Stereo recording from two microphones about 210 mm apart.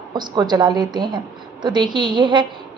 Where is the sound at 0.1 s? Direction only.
20° right (ahead or behind).